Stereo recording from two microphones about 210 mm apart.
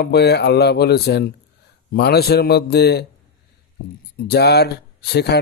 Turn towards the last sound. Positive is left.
turn(degrees=50)  # may be behind; listen again after turning